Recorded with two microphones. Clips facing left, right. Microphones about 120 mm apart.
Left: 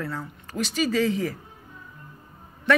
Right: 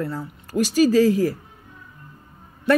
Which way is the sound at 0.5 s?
20° right (ahead or behind).